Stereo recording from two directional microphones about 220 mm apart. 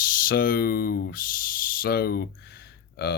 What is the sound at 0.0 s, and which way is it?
Speech, 40° left (ahead or behind).